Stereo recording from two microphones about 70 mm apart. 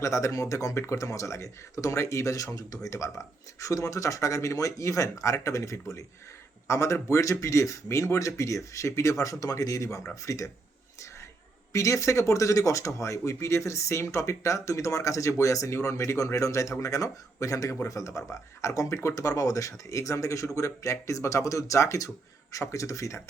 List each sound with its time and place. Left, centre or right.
0.0 s speech: left
11.7 s speech: left